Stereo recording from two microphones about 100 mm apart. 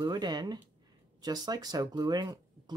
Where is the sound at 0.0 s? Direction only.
45° right (ahead or behind).